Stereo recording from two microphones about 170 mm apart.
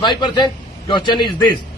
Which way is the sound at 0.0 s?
25° left (ahead or behind).